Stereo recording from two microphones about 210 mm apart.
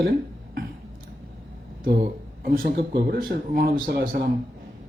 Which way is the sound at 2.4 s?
45° right (ahead or behind).